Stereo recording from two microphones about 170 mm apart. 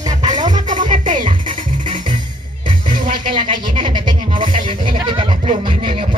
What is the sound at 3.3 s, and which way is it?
Music, 30° right (ahead or behind).